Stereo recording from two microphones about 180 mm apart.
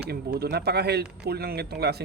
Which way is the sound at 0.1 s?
60° right (ahead or behind).